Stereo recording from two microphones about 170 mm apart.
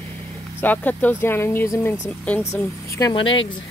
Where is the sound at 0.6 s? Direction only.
10° left (ahead or behind).